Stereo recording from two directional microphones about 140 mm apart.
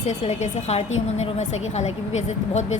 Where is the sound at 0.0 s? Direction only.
55° left (ahead or behind).